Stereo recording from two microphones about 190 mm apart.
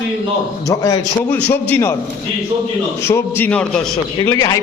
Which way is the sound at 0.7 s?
20° left (ahead or behind).